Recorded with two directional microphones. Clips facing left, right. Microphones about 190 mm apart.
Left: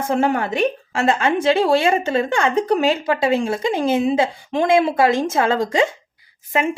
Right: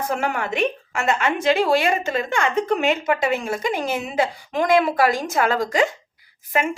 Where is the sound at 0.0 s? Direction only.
30° left (ahead or behind).